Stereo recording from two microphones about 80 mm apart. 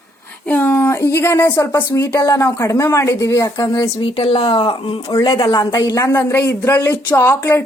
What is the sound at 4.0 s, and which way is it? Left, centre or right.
Speech, left.